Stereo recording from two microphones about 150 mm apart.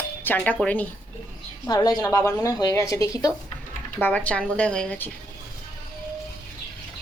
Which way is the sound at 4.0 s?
10° left (ahead or behind).